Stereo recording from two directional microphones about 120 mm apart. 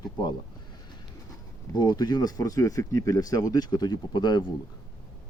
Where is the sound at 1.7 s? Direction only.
35° left (ahead or behind).